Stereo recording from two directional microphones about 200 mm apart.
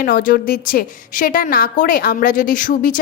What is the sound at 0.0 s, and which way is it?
A woman's voice, 45° left (ahead or behind).